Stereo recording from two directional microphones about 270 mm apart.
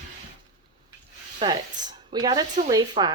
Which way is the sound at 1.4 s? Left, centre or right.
Centre.